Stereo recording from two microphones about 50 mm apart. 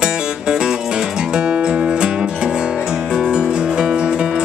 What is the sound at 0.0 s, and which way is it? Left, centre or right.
Music, centre.